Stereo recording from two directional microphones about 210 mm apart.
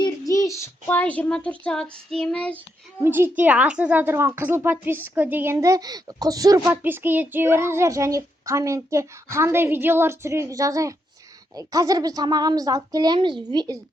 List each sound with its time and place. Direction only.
0.0 s a child's voice: 15° left (ahead or behind)
3.0 s speech: 10° right (ahead or behind)